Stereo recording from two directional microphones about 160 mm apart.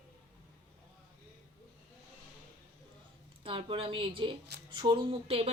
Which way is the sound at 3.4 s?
35° right (ahead or behind).